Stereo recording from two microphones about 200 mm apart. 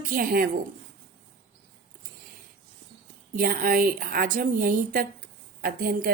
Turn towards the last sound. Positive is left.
turn(degrees=-50)  # may be behind; listen again after turning